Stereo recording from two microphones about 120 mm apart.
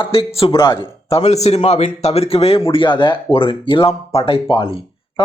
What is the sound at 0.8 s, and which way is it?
A man's voice, 55° left (ahead or behind).